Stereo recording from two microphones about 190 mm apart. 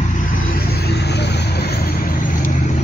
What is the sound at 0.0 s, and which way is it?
Vehicle, 45° left (ahead or behind).